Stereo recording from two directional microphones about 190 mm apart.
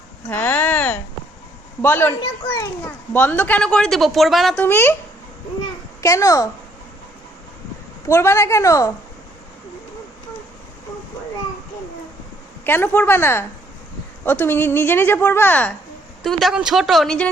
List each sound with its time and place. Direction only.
0.3 s a sound: 10° left (ahead or behind)
1.8 s a child's voice: 10° left (ahead or behind)
6.0 s a child's voice: 15° left (ahead or behind)
8.0 s a child's voice: 15° left (ahead or behind)
12.6 s a child's voice: 10° left (ahead or behind)